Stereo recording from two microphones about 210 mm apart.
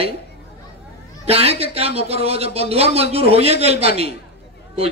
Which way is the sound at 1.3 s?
30° right (ahead or behind).